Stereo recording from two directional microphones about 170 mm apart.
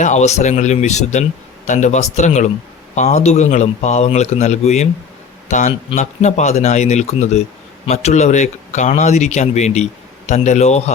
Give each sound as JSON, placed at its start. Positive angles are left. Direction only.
{"t": 0.0, "sound": "a man's voice", "side_deg": 45}